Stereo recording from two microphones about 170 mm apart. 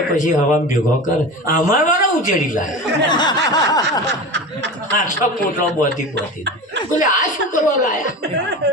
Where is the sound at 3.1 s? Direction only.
25° left (ahead or behind).